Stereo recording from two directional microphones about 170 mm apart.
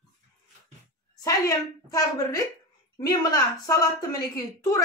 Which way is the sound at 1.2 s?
20° left (ahead or behind).